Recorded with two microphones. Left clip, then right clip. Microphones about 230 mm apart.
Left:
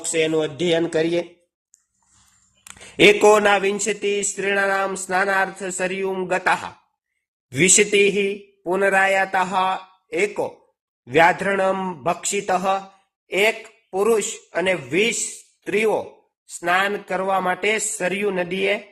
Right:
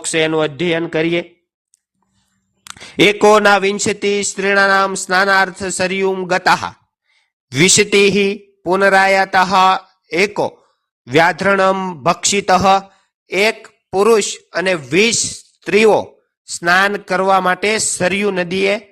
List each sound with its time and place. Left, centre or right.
0.1 s speech: right
2.6 s a man's voice: right